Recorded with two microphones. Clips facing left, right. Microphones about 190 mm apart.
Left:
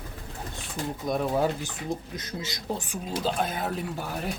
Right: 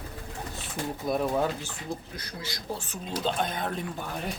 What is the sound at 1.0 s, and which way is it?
Speech, 5° right (ahead or behind).